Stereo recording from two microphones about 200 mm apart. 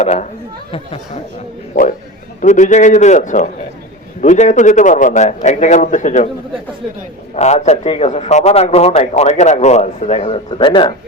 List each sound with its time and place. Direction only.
0.0 s a man's voice: 35° left (ahead or behind)
1.7 s a man's voice: 40° left (ahead or behind)
7.3 s a man's voice: 35° left (ahead or behind)